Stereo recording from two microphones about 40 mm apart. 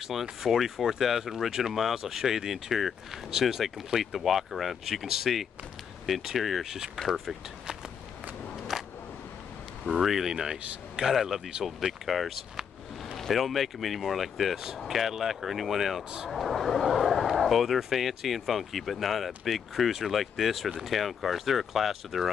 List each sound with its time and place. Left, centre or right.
0.1 s speech: centre
8.7 s single-lens reflex camera: centre
9.9 s speech: centre
16.0 s speech: centre
16.3 s speech: centre